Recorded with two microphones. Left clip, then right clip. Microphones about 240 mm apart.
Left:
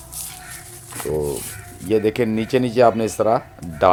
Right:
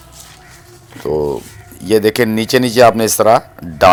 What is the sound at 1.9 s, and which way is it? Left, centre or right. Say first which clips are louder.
Speech: right 7 dB; right.